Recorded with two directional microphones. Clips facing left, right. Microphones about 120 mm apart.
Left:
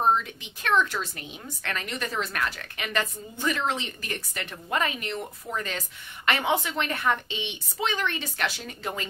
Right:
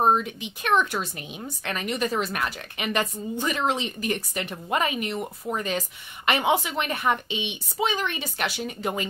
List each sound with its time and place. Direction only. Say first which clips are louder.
0.0 s a woman's voice: right 2 dB; 15° right (ahead or behind)